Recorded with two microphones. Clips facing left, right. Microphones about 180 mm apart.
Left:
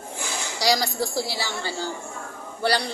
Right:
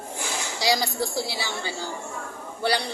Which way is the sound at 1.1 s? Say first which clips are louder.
Left 1 dB; 15° right (ahead or behind).